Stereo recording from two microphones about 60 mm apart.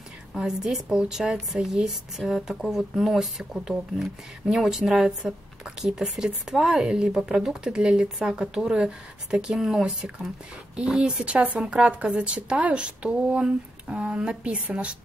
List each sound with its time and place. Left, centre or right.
0.3 s speech: centre